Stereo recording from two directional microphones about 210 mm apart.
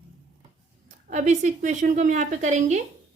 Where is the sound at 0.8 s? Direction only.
35° right (ahead or behind).